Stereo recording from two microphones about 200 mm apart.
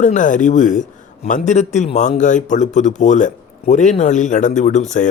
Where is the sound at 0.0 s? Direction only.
40° left (ahead or behind).